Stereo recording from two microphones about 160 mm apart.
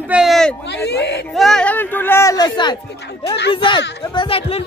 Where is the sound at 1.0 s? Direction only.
90° left.